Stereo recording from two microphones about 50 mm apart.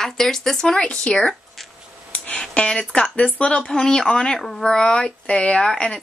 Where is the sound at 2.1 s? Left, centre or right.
Left.